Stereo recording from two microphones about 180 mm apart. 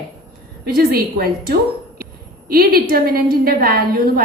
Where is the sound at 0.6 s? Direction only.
60° right (ahead or behind).